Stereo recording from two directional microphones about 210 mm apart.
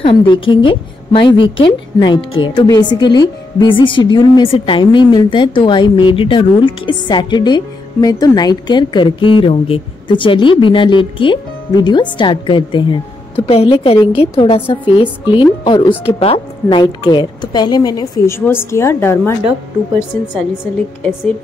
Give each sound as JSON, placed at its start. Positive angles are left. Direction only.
{"t": 0.0, "sound": "speech", "side_deg": 20}